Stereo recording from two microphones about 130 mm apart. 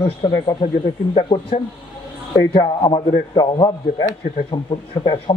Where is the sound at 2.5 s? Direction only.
35° left (ahead or behind).